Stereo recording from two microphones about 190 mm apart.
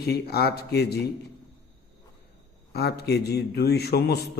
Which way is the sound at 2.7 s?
55° left (ahead or behind).